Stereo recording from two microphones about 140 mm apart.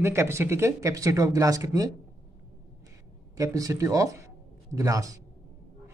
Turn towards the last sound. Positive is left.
turn(degrees=-25)  # may be behind; listen again after turning